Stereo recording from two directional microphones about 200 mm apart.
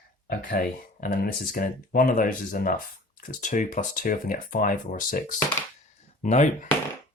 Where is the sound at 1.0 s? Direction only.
45° left (ahead or behind).